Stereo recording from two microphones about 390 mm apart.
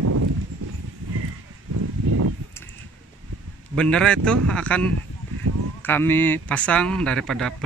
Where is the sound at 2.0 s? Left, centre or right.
Right.